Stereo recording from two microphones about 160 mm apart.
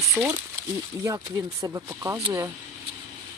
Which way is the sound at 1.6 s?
20° right (ahead or behind).